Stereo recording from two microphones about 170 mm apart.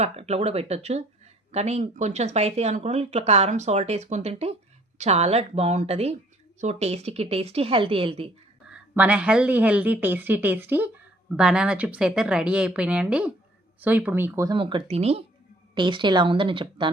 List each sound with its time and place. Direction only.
0.0 s speech: 40° right (ahead or behind)
8.7 s speech: 5° right (ahead or behind); by 16.9 s 30° right (ahead or behind)